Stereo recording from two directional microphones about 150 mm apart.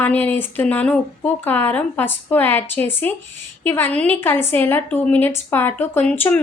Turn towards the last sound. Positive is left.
turn(degrees=15)  # may be behind; listen again after turning